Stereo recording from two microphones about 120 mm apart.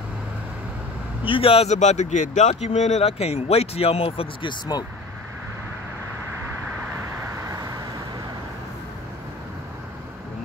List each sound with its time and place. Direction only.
1.2 s speech: 50° left (ahead or behind)
7.4 s vehicle: 30° right (ahead or behind)